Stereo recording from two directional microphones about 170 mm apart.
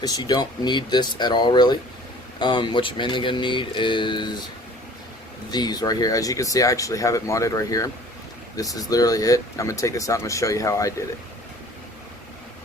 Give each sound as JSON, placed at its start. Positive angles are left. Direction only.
{"t": 0.0, "sound": "speech", "side_deg": 25}
{"t": 5.5, "sound": "speech", "side_deg": 25}